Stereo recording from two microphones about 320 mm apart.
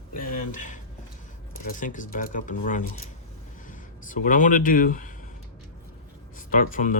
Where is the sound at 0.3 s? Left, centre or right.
Left.